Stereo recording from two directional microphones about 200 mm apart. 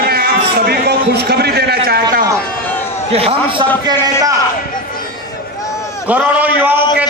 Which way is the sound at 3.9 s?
20° right (ahead or behind).